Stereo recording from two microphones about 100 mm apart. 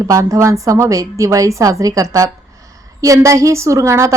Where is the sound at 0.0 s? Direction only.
35° right (ahead or behind).